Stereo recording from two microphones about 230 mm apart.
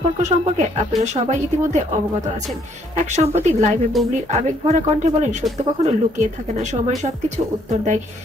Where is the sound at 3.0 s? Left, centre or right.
Right.